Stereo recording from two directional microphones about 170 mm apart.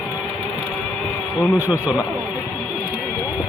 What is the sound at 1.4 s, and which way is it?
Speech, 10° right (ahead or behind).